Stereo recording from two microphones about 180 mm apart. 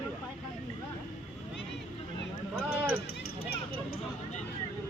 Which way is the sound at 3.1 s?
55° left (ahead or behind).